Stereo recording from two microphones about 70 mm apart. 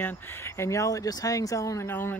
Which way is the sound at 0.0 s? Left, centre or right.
Left.